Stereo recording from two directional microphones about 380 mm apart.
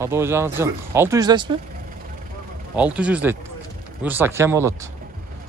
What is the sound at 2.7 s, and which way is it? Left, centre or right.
Speech, centre.